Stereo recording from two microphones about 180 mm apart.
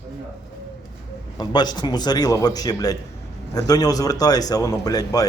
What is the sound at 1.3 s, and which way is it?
Speech, 25° left (ahead or behind).